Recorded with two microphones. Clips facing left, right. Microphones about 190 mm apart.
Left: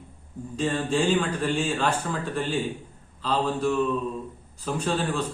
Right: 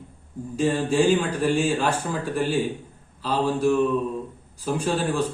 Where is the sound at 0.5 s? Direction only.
10° right (ahead or behind).